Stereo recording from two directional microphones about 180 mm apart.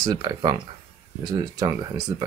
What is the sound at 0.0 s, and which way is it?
Speech, 25° right (ahead or behind).